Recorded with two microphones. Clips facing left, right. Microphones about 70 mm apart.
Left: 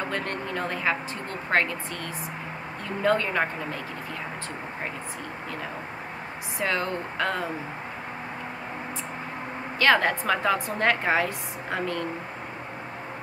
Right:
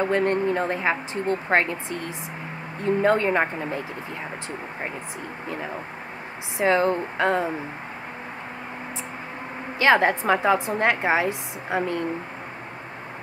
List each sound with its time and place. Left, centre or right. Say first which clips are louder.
0.1 s a woman's voice: right 9 dB; right
6.6 s a woman's voice: right 7 dB; right
9.8 s a woman's voice: right 3 dB; right